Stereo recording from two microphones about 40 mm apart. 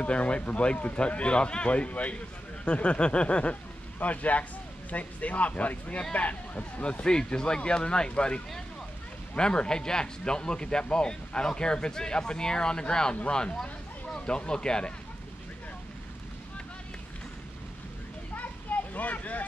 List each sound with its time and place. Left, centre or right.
0.0 s speech: left
4.0 s speech: left
9.4 s speech: left
18.3 s children playing: left